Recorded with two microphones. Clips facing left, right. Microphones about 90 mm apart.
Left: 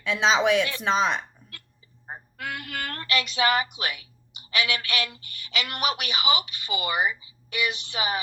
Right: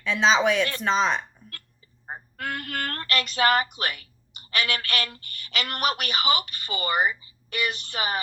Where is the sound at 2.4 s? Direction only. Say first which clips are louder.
Right 2 dB; 45° right (ahead or behind).